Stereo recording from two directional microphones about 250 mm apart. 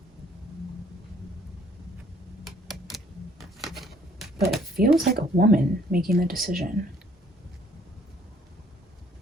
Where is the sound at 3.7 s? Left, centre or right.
Centre.